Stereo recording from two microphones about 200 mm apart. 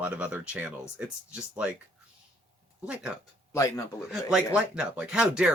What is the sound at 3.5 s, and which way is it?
Speech, 15° left (ahead or behind).